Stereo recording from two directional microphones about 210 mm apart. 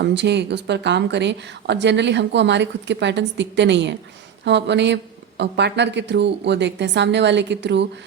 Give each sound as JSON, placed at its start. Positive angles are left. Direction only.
{"t": 0.0, "sound": "speech", "side_deg": -55}